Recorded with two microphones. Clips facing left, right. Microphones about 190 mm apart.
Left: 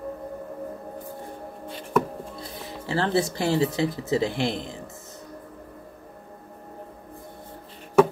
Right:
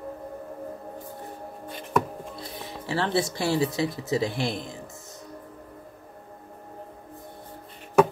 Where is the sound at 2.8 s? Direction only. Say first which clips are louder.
Left 2 dB; 30° left (ahead or behind).